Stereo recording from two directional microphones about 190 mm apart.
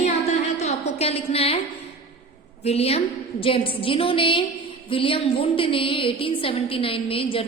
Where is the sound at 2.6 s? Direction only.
30° left (ahead or behind).